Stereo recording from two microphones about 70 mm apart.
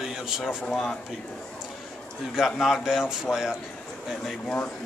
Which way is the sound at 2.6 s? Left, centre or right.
Centre.